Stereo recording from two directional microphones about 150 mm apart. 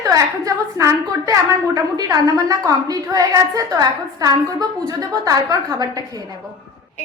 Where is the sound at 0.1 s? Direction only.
20° right (ahead or behind).